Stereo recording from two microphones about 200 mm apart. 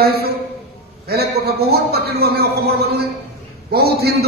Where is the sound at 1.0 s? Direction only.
50° right (ahead or behind).